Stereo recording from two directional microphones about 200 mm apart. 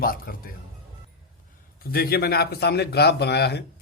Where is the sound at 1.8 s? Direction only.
50° left (ahead or behind).